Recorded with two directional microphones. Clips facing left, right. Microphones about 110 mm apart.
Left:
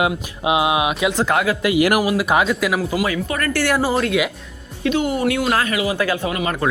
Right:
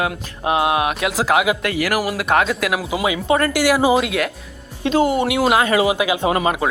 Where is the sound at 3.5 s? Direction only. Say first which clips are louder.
Even; 10° right (ahead or behind).